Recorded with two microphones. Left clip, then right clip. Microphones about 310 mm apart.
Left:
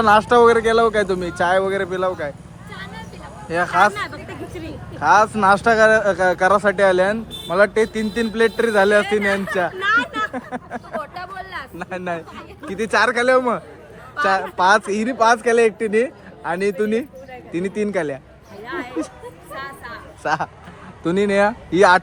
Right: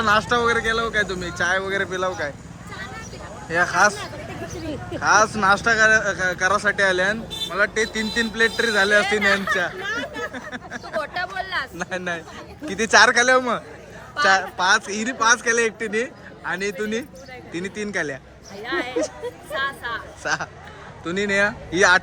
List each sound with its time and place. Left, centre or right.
0.0 s speech: centre
3.5 s speech: centre
11.0 s a sound: right
11.8 s speech: centre
18.6 s speech: centre
20.2 s speech: centre